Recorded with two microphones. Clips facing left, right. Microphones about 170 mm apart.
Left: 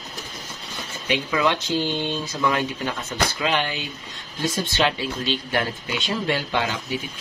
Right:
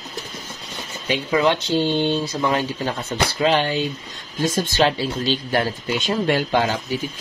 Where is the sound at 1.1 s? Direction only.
30° right (ahead or behind).